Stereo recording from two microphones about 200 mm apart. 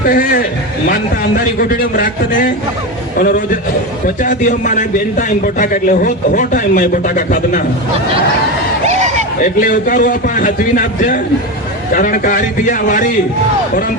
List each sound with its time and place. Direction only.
0.0 s a man's voice: 45° left (ahead or behind)
8.8 s a sound: 35° right (ahead or behind)
9.4 s a man's voice: 40° left (ahead or behind)